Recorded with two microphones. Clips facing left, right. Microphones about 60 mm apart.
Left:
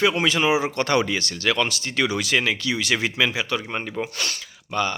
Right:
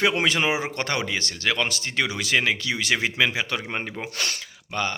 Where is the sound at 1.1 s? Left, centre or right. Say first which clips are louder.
Left 2 dB; right.